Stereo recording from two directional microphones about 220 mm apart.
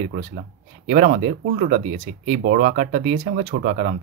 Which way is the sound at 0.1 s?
35° right (ahead or behind).